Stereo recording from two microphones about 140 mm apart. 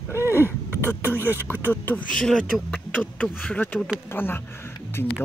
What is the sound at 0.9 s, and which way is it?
Speech, 15° right (ahead or behind).